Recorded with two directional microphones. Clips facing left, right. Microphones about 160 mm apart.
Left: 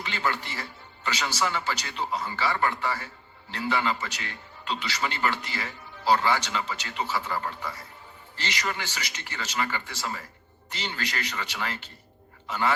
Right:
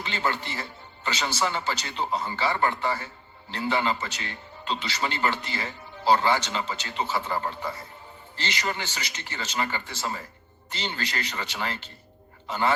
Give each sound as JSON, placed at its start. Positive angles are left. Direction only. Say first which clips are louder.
{"t": 0.0, "sound": "a man's voice", "louder": "right 1 dB", "side_deg": -30}